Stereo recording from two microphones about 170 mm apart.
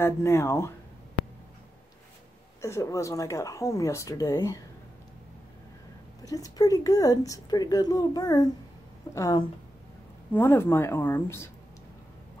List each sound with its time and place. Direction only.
0.0 s speech: 15° left (ahead or behind)
2.6 s speech: 20° left (ahead or behind)
6.2 s speech: 20° left (ahead or behind)